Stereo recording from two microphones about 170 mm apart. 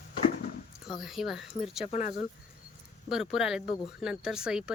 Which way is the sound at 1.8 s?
45° left (ahead or behind).